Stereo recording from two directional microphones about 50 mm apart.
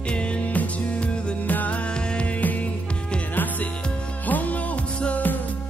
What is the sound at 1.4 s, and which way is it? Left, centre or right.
Music, left.